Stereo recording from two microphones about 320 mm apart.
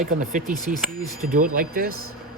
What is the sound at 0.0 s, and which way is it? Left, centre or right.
Speech, right.